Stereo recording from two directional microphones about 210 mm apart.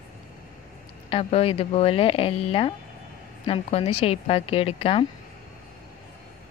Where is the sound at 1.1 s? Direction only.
25° left (ahead or behind).